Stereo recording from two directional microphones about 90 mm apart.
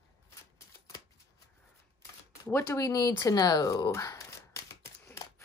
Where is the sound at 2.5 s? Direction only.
30° left (ahead or behind).